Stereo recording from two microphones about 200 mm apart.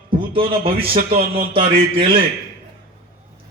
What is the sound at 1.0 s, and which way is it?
Speech, 45° right (ahead or behind).